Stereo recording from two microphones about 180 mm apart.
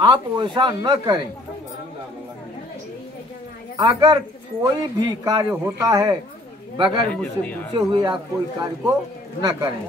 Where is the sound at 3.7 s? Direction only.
25° right (ahead or behind).